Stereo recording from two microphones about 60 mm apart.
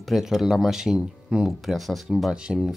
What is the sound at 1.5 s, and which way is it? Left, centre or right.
Speech, centre.